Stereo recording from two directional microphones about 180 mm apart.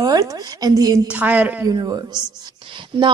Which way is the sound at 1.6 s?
20° right (ahead or behind).